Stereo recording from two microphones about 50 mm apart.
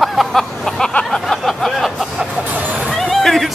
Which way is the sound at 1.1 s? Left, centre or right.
Centre.